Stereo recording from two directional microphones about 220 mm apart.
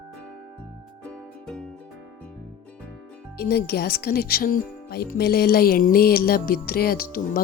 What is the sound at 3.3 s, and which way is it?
Speech, 45° left (ahead or behind).